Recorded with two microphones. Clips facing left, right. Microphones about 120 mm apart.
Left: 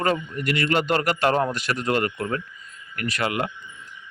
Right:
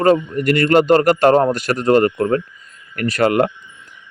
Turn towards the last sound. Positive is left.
turn(degrees=-45)  # may be behind; listen again after turning